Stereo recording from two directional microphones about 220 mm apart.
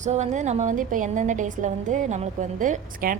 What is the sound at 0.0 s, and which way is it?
A woman's voice, 30° right (ahead or behind).